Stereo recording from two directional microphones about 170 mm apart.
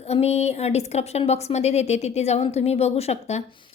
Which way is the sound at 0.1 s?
40° left (ahead or behind).